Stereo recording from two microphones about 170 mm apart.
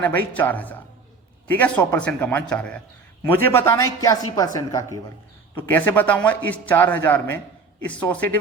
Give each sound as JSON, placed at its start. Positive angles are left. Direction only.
{"t": 0.1, "sound": "a man's voice", "side_deg": 10}